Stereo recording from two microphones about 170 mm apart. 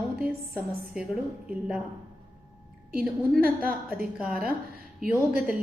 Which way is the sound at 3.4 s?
60° right (ahead or behind).